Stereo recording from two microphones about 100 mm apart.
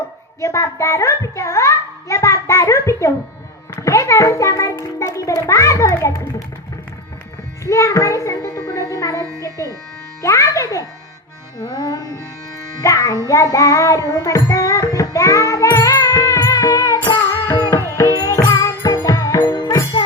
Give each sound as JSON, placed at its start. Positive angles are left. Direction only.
{"t": 0.4, "sound": "a child's voice", "side_deg": 30}
{"t": 7.6, "sound": "a child's voice", "side_deg": 30}
{"t": 14.1, "sound": "music", "side_deg": 35}